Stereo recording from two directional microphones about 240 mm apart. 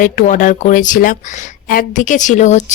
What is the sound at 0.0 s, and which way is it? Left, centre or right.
A woman's voice, left.